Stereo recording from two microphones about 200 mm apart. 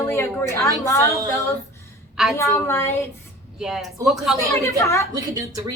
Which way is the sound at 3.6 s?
Centre (ahead or behind).